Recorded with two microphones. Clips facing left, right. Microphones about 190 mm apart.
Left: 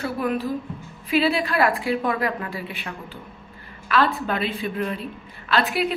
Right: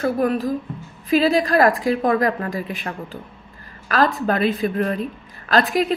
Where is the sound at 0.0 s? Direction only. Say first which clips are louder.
Right 5 dB; 40° right (ahead or behind).